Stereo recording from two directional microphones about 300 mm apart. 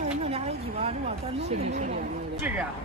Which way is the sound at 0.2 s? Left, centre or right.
Right.